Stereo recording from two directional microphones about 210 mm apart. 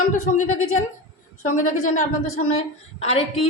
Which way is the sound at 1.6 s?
35° left (ahead or behind).